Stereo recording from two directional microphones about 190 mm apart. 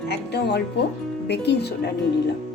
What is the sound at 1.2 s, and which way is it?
Speech, 60° left (ahead or behind).